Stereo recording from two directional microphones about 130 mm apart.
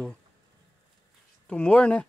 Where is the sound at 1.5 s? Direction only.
10° left (ahead or behind).